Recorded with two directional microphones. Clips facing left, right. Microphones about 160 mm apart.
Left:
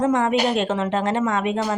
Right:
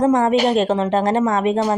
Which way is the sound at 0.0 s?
35° right (ahead or behind).